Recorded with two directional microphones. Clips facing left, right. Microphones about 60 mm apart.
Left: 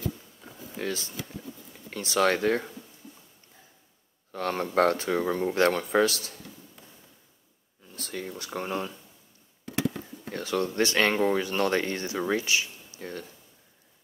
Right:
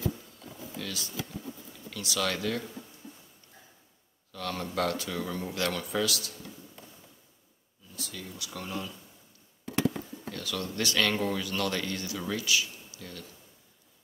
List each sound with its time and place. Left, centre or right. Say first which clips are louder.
0.4 s a sound: even; left
0.7 s speech: left 5 dB; left
4.3 s speech: left 6 dB; left
7.9 s speech: left 6 dB; left
10.3 s speech: left 8 dB; left